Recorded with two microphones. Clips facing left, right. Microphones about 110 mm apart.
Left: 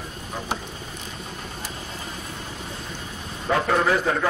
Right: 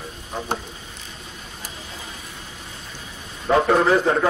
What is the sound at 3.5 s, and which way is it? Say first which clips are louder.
Speech: right 4 dB; 20° right (ahead or behind).